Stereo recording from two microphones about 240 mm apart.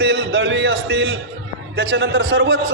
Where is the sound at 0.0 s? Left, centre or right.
Right.